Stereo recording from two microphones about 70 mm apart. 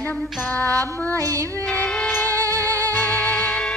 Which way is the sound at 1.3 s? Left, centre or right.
Right.